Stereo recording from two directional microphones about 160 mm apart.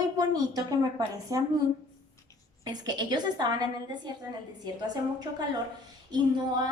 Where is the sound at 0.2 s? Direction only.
25° right (ahead or behind).